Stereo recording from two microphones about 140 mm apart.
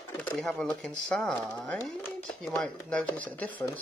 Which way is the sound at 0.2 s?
5° left (ahead or behind).